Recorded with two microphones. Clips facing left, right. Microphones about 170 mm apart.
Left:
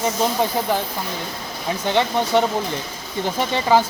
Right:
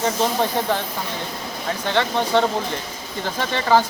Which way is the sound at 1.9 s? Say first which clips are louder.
Left 1 dB; 15° left (ahead or behind).